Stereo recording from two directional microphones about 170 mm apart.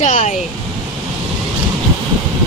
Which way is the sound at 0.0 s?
45° left (ahead or behind).